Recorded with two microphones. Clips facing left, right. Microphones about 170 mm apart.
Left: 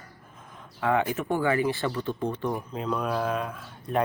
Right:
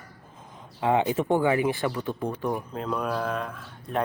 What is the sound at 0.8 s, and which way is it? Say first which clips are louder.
Speech: right 2 dB; 25° right (ahead or behind).